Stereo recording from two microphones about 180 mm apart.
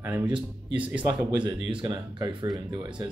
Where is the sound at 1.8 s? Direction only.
25° right (ahead or behind).